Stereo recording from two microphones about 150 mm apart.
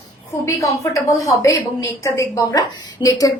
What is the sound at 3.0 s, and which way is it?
Speech, 25° left (ahead or behind).